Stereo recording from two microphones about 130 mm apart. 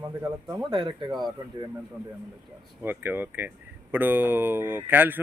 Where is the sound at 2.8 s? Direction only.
15° right (ahead or behind).